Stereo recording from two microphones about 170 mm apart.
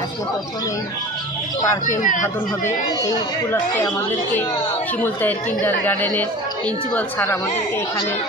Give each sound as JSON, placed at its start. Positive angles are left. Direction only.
{"t": 1.9, "sound": "speech", "side_deg": 50}
{"t": 3.7, "sound": "speech", "side_deg": 15}